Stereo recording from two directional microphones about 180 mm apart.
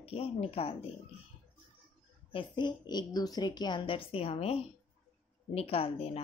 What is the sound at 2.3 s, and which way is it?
A woman's voice, 25° left (ahead or behind).